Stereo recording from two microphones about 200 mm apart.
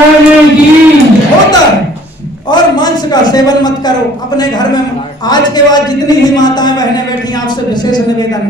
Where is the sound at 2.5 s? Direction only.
20° left (ahead or behind).